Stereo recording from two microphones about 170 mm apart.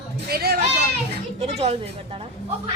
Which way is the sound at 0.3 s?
65° right (ahead or behind).